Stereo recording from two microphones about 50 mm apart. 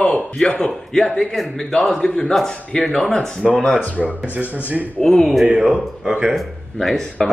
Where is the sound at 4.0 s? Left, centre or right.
Right.